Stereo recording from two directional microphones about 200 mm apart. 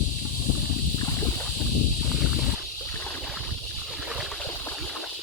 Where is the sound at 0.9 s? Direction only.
15° left (ahead or behind).